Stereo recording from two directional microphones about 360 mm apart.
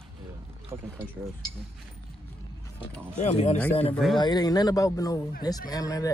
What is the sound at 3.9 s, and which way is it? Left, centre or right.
Speech, centre.